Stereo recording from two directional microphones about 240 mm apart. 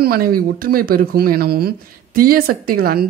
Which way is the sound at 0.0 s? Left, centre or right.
Right.